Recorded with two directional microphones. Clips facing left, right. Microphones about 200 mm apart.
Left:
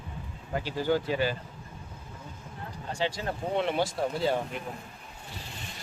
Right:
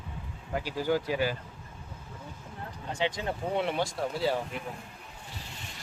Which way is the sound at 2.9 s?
20° right (ahead or behind).